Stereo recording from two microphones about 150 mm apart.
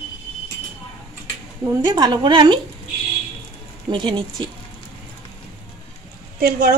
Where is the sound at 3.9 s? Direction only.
35° right (ahead or behind).